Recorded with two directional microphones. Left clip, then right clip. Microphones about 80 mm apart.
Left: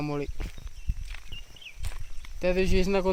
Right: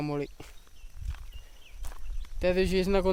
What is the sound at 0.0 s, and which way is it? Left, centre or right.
Speech, right.